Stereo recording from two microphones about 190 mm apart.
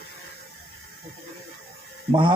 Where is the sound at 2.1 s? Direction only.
25° right (ahead or behind).